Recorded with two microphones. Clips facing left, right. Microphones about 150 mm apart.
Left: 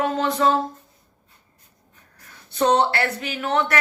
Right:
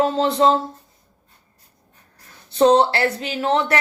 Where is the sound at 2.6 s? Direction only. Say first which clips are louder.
Right 4 dB; 30° right (ahead or behind).